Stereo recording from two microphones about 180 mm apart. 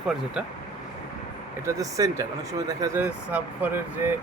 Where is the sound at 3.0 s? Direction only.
10° right (ahead or behind).